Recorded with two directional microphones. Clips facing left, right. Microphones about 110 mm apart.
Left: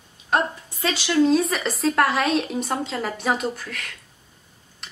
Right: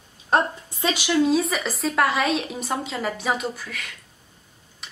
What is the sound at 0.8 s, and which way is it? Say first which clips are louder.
Speech: right 1 dB; 15° right (ahead or behind).